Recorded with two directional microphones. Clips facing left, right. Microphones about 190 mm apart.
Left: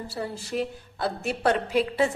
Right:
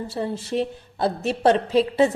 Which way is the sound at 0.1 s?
25° right (ahead or behind).